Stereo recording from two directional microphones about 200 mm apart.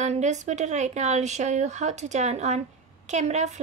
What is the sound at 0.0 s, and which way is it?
Speech, 35° right (ahead or behind).